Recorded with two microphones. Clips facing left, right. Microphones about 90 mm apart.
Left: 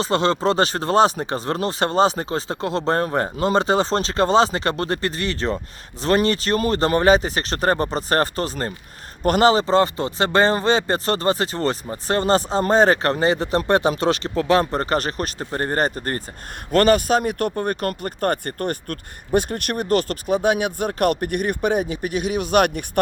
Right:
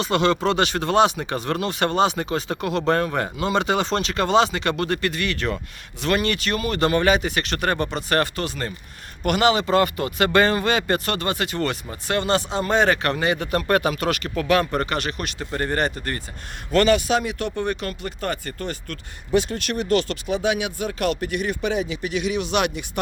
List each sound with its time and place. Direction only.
0.0 s speech: 30° left (ahead or behind); by 22.9 s 50° left (ahead or behind)